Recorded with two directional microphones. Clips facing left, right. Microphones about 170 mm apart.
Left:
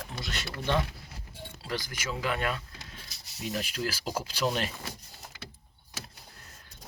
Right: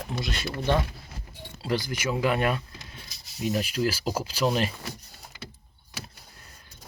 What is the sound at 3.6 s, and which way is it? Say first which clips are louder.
Speech: right 7 dB; 5° right (ahead or behind).